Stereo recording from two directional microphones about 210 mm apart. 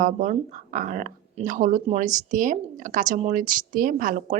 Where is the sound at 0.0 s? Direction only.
35° right (ahead or behind).